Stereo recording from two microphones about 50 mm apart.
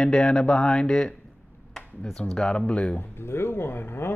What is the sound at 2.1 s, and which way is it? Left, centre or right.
Speech, centre.